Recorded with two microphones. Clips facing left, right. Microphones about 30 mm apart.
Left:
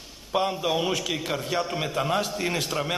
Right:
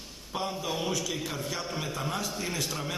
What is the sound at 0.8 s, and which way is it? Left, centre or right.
A man's voice, left.